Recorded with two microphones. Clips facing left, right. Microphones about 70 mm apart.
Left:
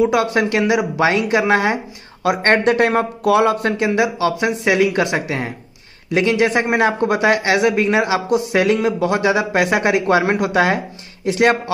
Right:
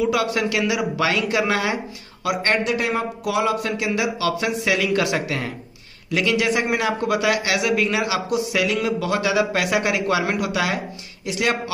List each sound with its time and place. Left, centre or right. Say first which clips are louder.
0.0 s speech: left 5 dB; left